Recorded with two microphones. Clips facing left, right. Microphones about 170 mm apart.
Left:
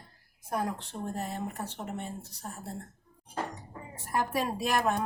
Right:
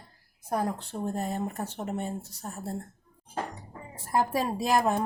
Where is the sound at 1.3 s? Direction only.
45° right (ahead or behind).